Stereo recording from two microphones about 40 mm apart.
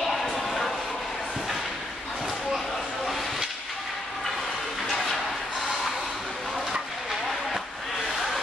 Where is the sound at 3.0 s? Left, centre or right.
Centre.